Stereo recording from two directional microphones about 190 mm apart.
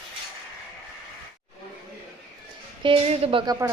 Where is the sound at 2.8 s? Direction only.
25° right (ahead or behind).